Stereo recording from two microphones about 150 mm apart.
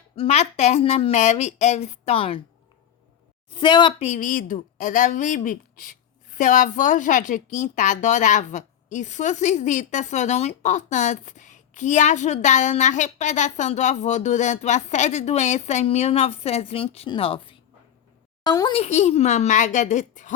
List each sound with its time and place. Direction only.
0.2 s a woman's voice: 45° left (ahead or behind)
3.5 s speech: 30° left (ahead or behind)
4.0 s a woman's voice: 60° left (ahead or behind); by 18.7 s 25° left (ahead or behind)
18.7 s a woman's voice: 45° left (ahead or behind)